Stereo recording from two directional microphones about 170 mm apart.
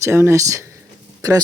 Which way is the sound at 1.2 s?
20° right (ahead or behind).